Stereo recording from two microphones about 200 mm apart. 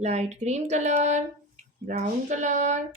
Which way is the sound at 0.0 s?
35° right (ahead or behind).